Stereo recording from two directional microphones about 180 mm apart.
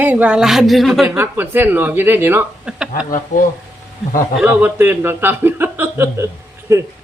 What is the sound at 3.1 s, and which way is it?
Speech, 50° left (ahead or behind).